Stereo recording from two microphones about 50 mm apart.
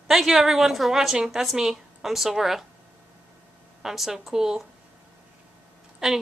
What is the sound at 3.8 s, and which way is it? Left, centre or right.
Speech, centre.